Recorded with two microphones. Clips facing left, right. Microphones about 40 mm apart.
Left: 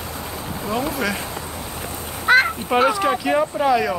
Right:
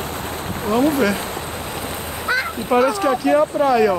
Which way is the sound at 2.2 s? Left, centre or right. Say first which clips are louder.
Left 6 dB; left.